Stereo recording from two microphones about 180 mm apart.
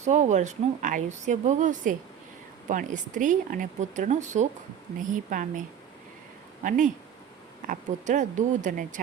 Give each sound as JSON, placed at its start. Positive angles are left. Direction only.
{"t": 0.0, "sound": "a woman's voice", "side_deg": -40}